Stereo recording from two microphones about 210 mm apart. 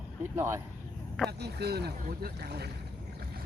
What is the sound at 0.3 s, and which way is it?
Speech, 15° right (ahead or behind).